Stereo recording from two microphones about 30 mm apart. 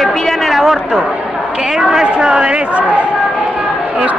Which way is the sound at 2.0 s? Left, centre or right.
Right.